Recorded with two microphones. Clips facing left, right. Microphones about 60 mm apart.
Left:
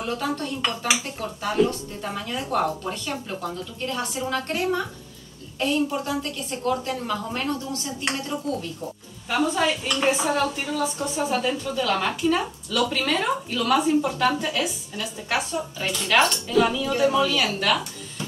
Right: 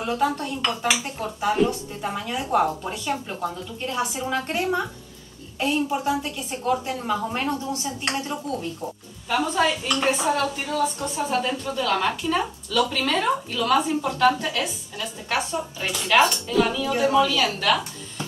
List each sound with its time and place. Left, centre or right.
0.0 s a woman's voice: centre
9.3 s speech: centre